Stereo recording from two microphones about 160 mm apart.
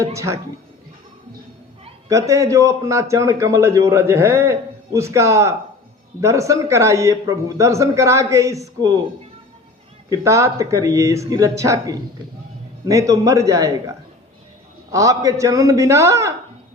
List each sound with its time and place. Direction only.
0.0 s speech: 20° right (ahead or behind)
2.0 s a man's voice: 20° right (ahead or behind)
10.1 s a man's voice: 20° right (ahead or behind)
14.9 s a man's voice: 20° right (ahead or behind)